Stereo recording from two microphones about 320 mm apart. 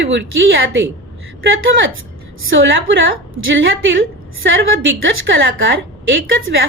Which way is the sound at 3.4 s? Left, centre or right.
Right.